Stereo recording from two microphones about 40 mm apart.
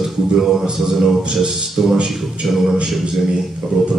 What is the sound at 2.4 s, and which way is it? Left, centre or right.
Speech, centre.